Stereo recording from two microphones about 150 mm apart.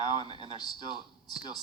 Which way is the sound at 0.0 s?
30° left (ahead or behind).